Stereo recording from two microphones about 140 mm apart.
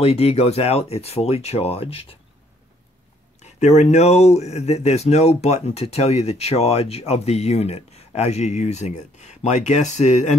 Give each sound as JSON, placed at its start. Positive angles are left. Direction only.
{"t": 0.0, "sound": "speech", "side_deg": 45}
{"t": 3.4, "sound": "speech", "side_deg": 55}